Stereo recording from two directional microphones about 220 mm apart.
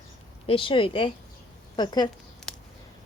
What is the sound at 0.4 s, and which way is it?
A woman's voice, 25° left (ahead or behind).